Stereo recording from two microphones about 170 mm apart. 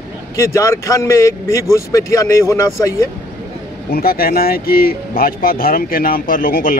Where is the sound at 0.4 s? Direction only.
20° left (ahead or behind).